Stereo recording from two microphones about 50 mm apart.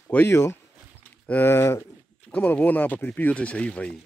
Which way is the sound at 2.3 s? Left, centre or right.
Left.